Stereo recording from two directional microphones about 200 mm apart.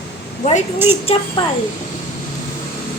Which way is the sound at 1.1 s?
30° left (ahead or behind).